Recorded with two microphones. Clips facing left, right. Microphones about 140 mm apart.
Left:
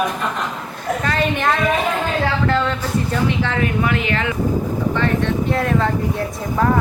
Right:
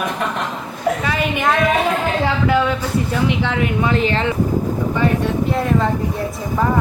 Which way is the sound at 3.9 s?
30° right (ahead or behind).